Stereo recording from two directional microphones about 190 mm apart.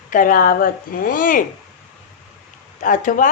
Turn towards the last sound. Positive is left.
turn(degrees=40)  # may be behind; listen again after turning